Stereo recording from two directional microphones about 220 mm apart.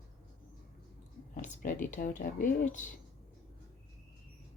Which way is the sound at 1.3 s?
35° left (ahead or behind).